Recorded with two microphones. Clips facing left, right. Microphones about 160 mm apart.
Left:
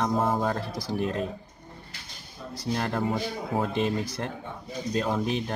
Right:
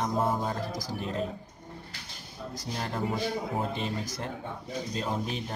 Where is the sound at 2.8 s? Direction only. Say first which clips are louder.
Left 4 dB; 65° left (ahead or behind).